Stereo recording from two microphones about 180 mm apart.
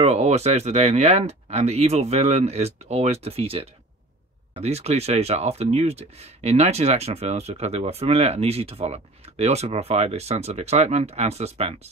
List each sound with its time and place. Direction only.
0.0 s speech: 35° right (ahead or behind)